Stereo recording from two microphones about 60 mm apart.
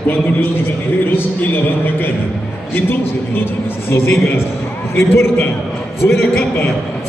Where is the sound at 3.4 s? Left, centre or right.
Left.